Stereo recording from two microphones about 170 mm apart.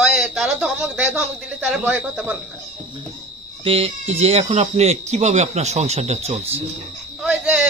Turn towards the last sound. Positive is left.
turn(degrees=-5)  # may be behind; listen again after turning